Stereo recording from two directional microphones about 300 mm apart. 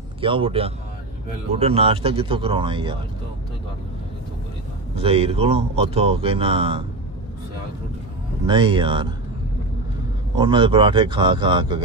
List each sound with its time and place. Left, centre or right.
0.2 s speech: centre
4.9 s speech: centre
8.5 s speech: centre
10.3 s speech: centre